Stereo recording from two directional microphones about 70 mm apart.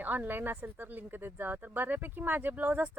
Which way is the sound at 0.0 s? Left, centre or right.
Right.